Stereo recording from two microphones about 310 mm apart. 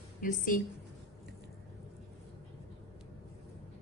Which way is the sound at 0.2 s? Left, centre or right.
Left.